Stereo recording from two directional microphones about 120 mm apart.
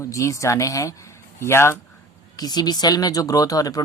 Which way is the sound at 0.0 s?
25° left (ahead or behind).